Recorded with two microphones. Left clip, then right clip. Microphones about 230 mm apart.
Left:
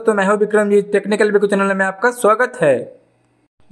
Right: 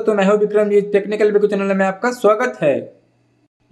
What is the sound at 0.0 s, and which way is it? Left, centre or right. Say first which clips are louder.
Speech: even; centre.